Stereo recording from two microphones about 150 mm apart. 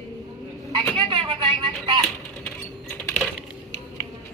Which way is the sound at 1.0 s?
35° right (ahead or behind).